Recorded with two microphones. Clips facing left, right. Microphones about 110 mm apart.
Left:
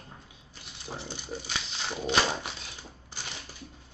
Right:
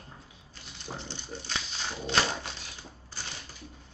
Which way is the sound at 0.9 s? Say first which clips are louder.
Left 3 dB; 10° left (ahead or behind).